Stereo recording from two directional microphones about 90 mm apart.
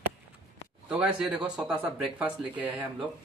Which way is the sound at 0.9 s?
10° right (ahead or behind).